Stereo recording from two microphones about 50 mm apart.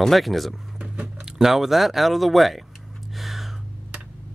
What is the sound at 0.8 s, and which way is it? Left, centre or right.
Biting, right.